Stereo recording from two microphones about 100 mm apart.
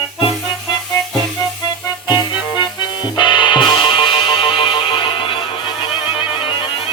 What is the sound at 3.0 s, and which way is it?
Music, 50° left (ahead or behind).